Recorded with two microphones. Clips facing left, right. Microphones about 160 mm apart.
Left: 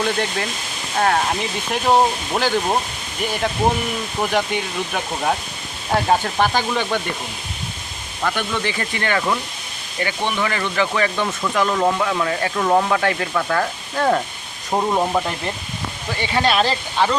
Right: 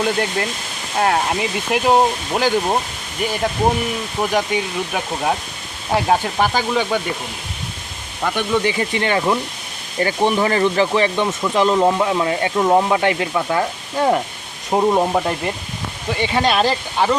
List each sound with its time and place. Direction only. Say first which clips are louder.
0.0 s speech: right 2 dB; 5° right (ahead or behind)
4.2 s speech: right 2 dB; 10° right (ahead or behind)
8.2 s speech: right 4 dB; 15° right (ahead or behind)
10.0 s speech: right 5 dB; 35° right (ahead or behind); by 17.2 s 10° right (ahead or behind)